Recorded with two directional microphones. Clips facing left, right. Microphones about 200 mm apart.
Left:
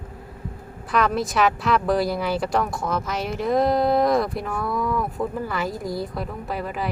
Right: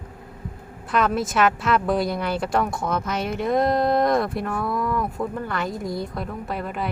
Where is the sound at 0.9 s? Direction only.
Centre (ahead or behind).